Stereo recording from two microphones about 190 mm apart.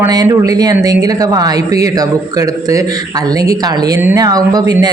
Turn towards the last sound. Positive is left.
turn(degrees=-20)  # may be behind; listen again after turning